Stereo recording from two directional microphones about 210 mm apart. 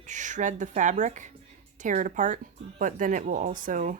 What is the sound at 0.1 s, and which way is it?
Speech, 35° right (ahead or behind).